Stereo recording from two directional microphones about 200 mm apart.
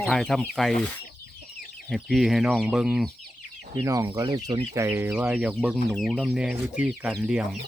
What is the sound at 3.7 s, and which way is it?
Speech, 15° right (ahead or behind).